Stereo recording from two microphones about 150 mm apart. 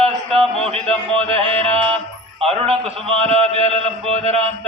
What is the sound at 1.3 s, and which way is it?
Music, 40° right (ahead or behind).